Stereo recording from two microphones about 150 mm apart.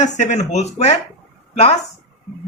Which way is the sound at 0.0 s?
55° left (ahead or behind).